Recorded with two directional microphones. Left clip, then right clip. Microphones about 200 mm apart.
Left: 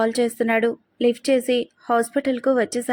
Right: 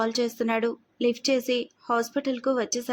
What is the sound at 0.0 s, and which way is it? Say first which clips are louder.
Speech: left 5 dB; 10° left (ahead or behind).